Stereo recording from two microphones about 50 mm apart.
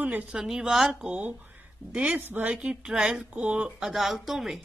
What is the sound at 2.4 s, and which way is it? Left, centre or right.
Speech, centre.